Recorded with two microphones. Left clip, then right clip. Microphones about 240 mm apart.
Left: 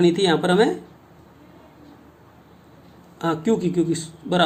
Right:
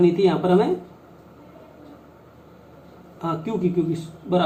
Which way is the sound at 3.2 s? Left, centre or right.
Left.